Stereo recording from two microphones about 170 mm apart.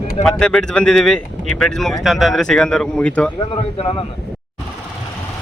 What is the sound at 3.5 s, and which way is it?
Speech, 30° left (ahead or behind).